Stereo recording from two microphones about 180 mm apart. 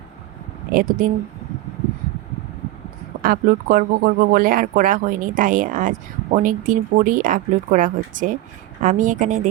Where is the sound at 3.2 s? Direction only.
50° right (ahead or behind).